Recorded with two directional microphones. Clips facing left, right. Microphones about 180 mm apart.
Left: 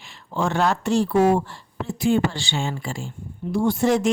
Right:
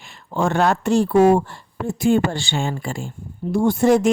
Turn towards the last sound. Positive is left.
turn(degrees=-50)  # may be behind; listen again after turning